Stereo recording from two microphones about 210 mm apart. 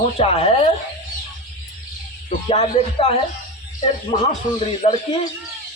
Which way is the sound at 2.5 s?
30° left (ahead or behind).